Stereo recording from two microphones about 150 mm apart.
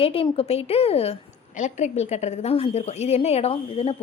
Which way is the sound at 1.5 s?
50° left (ahead or behind).